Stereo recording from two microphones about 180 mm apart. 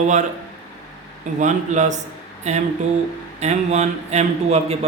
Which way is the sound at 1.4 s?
40° right (ahead or behind).